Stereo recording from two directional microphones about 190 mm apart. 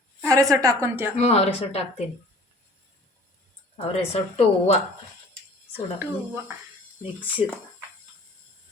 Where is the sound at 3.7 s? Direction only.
30° left (ahead or behind).